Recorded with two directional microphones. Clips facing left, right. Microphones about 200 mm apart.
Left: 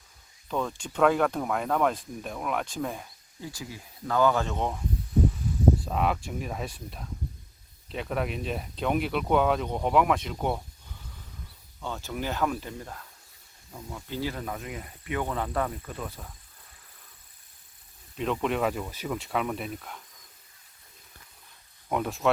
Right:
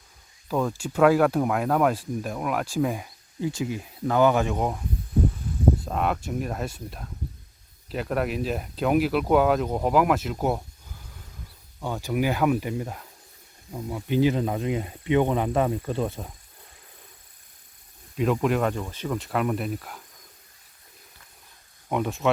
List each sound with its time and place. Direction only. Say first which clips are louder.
0.4 s speech: right 5 dB; 5° right (ahead or behind)
3.5 s speech: right 11 dB; 20° right (ahead or behind)
5.8 s speech: right 1 dB; centre (ahead or behind)
7.9 s speech: right 4 dB; 5° right (ahead or behind)
11.8 s speech: right 7 dB; 15° right (ahead or behind)
18.2 s speech: right 4 dB; 5° right (ahead or behind)
21.8 s speech: right 2 dB; centre (ahead or behind)